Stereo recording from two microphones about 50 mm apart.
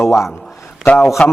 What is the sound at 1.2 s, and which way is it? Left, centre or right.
Speech, left.